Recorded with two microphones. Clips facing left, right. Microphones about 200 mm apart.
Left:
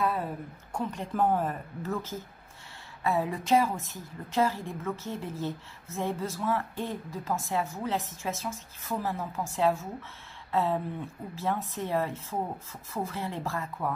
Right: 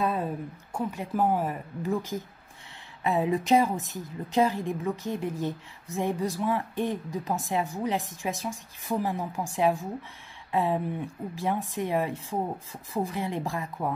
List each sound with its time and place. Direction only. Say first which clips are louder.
0.7 s a woman's voice: right 1 dB; 10° right (ahead or behind)